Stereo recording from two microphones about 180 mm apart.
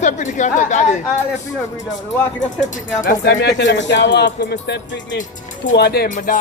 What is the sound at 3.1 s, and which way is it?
Speech, 75° left (ahead or behind).